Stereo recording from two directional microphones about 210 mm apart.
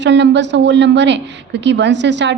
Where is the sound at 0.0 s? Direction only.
55° right (ahead or behind).